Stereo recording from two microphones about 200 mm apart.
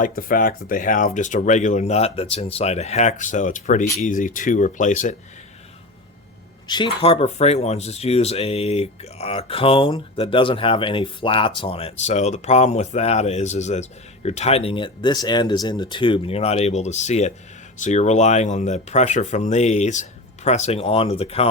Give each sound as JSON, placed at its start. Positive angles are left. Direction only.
{"t": 0.0, "sound": "speech", "side_deg": 45}
{"t": 6.7, "sound": "speech", "side_deg": 25}